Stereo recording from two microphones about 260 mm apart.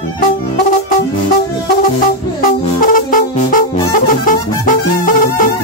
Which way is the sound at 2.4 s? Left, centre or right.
Left.